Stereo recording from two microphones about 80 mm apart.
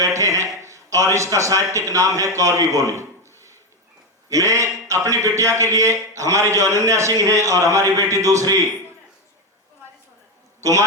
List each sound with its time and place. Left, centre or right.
0.0 s a sound: right
0.6 s a man's voice: right
4.3 s a man's voice: right
10.6 s a man's voice: right